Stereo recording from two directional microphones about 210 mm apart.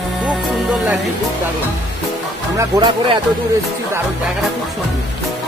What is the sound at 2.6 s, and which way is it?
Speech, 20° right (ahead or behind).